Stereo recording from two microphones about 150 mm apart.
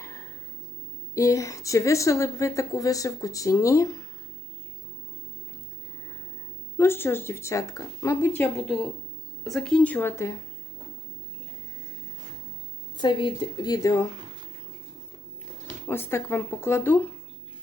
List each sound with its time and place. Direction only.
0.0 s a sound: 20° left (ahead or behind)
1.1 s speech: 20° left (ahead or behind)
6.7 s speech: 15° left (ahead or behind)
8.5 s a woman's voice: centre (ahead or behind); by 10.4 s 20° left (ahead or behind)
13.0 s speech: 30° left (ahead or behind)
15.9 s speech: 15° left (ahead or behind)